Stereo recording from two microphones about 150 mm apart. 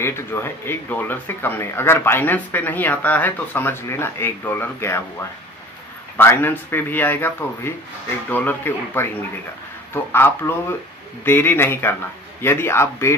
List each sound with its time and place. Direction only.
0.0 s speech: 15° left (ahead or behind)
6.1 s speech: 15° left (ahead or behind)
10.1 s speech: 15° left (ahead or behind)